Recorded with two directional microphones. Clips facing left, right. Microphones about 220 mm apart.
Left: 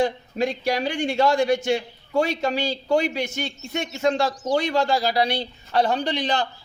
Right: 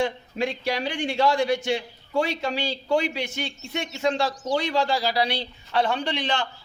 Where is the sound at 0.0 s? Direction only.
40° left (ahead or behind).